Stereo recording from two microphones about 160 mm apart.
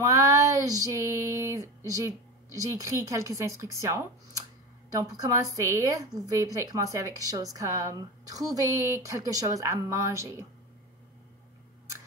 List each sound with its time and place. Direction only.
0.0 s female singing: 20° right (ahead or behind)
2.5 s a woman's voice: 20° right (ahead or behind)